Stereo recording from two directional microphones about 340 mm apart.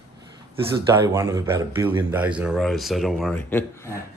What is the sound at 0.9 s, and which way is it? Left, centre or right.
A man's voice, centre.